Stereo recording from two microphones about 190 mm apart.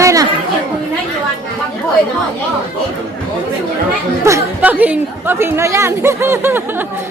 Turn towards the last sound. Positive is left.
turn(degrees=-10)  # may be behind; listen again after turning